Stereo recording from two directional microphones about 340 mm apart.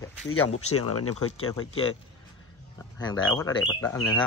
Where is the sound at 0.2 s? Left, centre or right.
Left.